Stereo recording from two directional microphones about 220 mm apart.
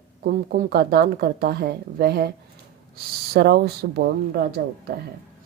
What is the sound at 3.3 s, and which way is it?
Speech, 50° right (ahead or behind).